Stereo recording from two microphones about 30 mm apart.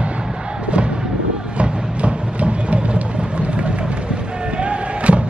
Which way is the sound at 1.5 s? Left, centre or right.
Right.